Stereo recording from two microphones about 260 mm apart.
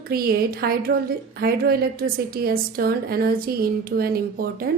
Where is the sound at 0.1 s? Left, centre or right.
Right.